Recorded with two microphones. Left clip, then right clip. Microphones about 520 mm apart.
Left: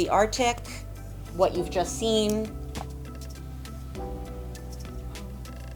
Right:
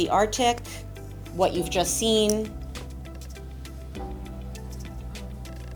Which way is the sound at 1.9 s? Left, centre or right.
Centre.